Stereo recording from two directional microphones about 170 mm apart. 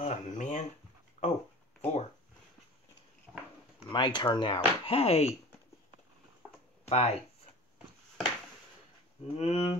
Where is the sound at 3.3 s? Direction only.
10° right (ahead or behind).